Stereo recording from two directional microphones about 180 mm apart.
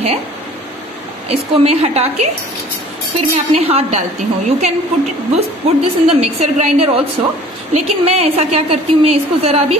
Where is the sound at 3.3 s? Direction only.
35° right (ahead or behind).